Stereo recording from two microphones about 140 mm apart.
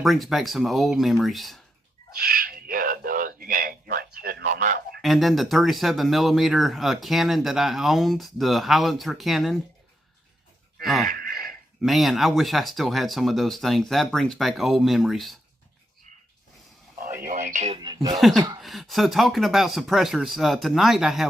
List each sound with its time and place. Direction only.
0.0 s speech: centre (ahead or behind)
2.1 s a sound: 90° right; by 4.8 s 65° right (ahead or behind)
5.0 s speech: centre (ahead or behind)
10.8 s speech: centre (ahead or behind)
11.1 s gasp: 90° right
11.8 s speech: centre (ahead or behind)
17.2 s speech: 60° right (ahead or behind)
17.7 s speech: 30° right (ahead or behind)
18.2 s speech: centre (ahead or behind)